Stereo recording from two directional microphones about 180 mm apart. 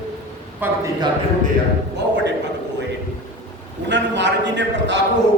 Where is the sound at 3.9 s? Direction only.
75° right (ahead or behind).